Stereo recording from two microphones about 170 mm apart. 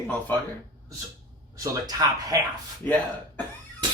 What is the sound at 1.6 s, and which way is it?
Speech, 20° right (ahead or behind).